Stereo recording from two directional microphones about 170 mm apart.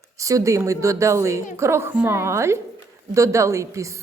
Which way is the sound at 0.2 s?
20° right (ahead or behind).